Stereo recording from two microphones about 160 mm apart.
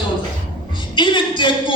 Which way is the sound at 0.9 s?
30° left (ahead or behind).